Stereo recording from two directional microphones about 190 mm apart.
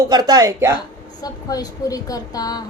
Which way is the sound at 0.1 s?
20° right (ahead or behind).